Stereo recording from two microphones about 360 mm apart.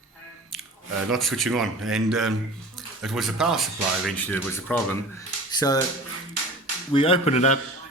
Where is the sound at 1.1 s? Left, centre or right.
Centre.